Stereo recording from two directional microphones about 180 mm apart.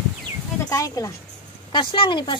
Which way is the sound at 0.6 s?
20° left (ahead or behind).